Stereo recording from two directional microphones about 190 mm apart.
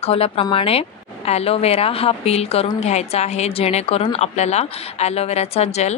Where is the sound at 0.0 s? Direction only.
30° left (ahead or behind).